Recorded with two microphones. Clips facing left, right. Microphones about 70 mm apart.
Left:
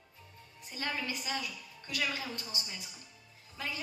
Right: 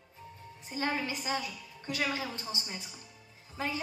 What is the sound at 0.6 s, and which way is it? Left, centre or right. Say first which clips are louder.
A woman's voice: right 4 dB; right.